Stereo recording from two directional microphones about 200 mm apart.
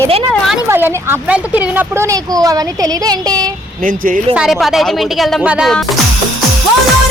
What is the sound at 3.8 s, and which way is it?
Speech, 45° right (ahead or behind).